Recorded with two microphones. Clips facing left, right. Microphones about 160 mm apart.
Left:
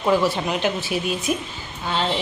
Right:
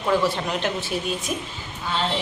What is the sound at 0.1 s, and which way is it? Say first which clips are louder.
Speech: left 1 dB; 10° left (ahead or behind).